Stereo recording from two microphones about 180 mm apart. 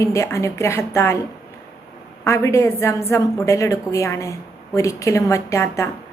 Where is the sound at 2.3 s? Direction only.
15° left (ahead or behind).